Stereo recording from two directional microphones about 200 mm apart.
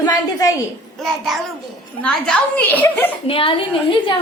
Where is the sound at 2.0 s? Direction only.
5° left (ahead or behind).